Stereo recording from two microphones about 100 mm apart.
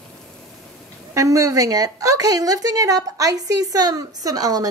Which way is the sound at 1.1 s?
35° right (ahead or behind).